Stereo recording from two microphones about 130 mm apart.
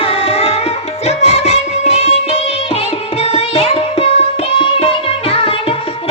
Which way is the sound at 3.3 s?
50° left (ahead or behind).